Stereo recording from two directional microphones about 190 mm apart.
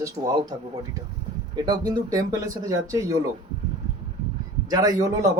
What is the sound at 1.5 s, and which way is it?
Speech, 25° right (ahead or behind).